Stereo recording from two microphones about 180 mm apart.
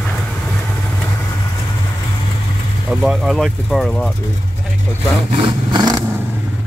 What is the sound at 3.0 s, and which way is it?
Speech, centre (ahead or behind).